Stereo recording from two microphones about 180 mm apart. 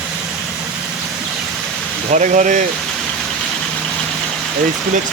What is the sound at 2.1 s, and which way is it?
Speech, 45° right (ahead or behind).